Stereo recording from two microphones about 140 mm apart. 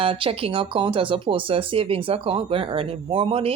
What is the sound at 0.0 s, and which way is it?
Speech, 40° right (ahead or behind).